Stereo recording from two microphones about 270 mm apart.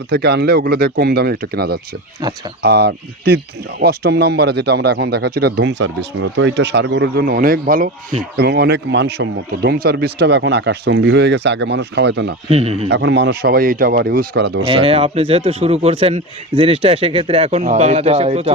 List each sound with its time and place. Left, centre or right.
0.1 s speech: right
2.2 s speech: centre
2.6 s speech: right
12.5 s speech: right
12.9 s speech: right
14.6 s speech: right